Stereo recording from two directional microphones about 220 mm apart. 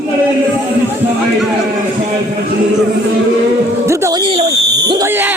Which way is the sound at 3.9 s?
15° right (ahead or behind).